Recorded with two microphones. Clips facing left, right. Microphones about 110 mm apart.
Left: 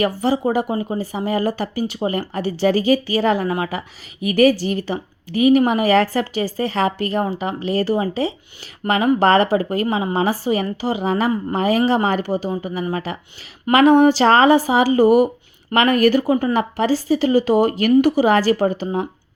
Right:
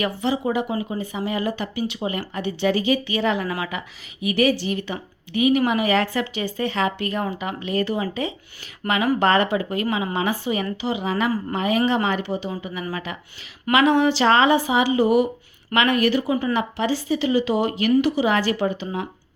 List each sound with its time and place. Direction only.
0.0 s speech: 40° left (ahead or behind)